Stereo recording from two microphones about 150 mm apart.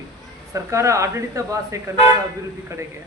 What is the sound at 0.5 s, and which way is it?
Speech, 20° right (ahead or behind).